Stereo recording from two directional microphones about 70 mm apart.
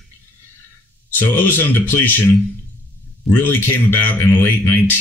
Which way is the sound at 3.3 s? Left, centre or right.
Left.